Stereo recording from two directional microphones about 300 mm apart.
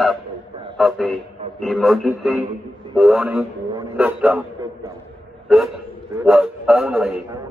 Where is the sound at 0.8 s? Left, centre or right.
Centre.